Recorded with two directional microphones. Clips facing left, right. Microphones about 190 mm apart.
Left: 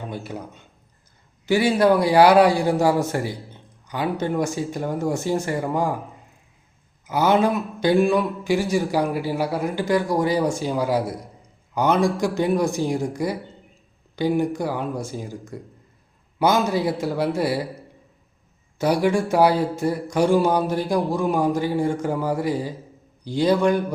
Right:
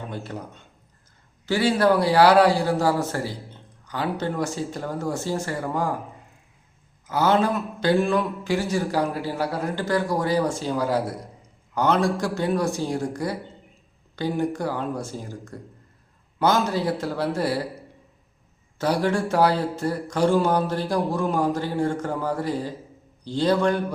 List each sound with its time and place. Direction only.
0.1 s a man's voice: 10° left (ahead or behind)
7.1 s a man's voice: 15° left (ahead or behind)
18.8 s a man's voice: 10° left (ahead or behind)